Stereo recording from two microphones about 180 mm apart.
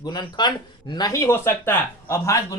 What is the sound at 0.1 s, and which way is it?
Speech, 25° left (ahead or behind).